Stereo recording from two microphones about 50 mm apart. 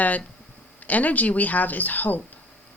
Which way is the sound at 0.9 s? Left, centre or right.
Left.